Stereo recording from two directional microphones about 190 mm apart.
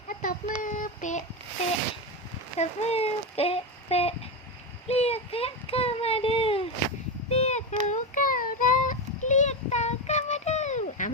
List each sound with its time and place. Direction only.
0.1 s child singing: 45° left (ahead or behind)
2.6 s speech: 35° left (ahead or behind)
4.9 s a sound: 30° left (ahead or behind)
7.3 s child singing: 35° left (ahead or behind)